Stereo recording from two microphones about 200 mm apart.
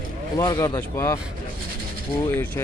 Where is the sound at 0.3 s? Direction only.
20° left (ahead or behind).